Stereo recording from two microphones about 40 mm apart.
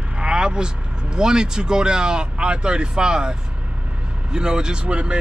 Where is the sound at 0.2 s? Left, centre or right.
Right.